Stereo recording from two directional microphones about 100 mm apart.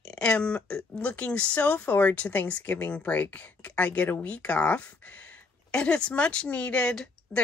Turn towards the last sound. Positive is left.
turn(degrees=10)  # may be behind; listen again after turning